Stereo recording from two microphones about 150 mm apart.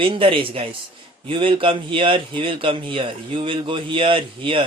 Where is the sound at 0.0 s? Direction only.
35° right (ahead or behind).